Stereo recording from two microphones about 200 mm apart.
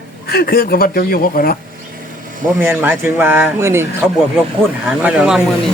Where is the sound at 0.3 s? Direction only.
50° left (ahead or behind).